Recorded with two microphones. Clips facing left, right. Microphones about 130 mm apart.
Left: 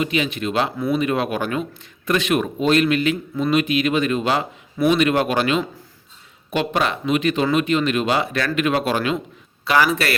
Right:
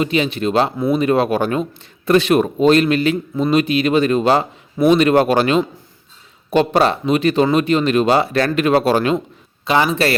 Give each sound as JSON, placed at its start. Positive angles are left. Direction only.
{"t": 0.0, "sound": "speech", "side_deg": -35}
{"t": 9.6, "sound": "speech", "side_deg": -25}